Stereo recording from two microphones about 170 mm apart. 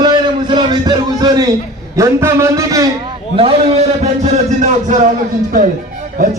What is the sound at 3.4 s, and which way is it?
A man's voice, 35° right (ahead or behind).